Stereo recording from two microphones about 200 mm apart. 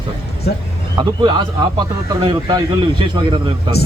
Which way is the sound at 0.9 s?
20° right (ahead or behind).